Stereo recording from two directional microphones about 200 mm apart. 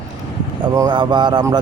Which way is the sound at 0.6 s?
20° right (ahead or behind).